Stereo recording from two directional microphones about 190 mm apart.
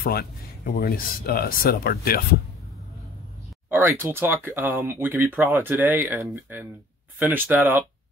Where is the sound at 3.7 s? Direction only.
10° right (ahead or behind).